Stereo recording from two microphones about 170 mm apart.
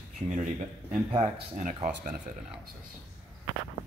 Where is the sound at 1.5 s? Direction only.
50° right (ahead or behind).